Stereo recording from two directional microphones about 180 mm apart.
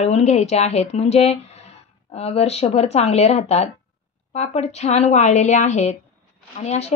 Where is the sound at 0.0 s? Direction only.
35° left (ahead or behind).